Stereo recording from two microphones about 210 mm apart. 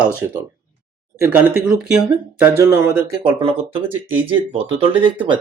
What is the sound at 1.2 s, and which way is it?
Speech, 10° right (ahead or behind).